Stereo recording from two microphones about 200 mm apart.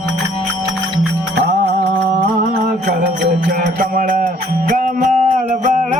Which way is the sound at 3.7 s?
45° right (ahead or behind).